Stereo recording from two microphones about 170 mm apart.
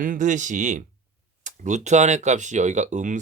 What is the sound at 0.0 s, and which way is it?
Speech, 50° right (ahead or behind).